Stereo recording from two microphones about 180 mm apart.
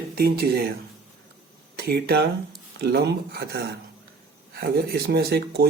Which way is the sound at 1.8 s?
60° right (ahead or behind).